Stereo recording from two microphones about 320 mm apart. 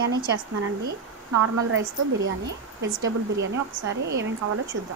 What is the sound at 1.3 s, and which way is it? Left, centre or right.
A woman's voice, right.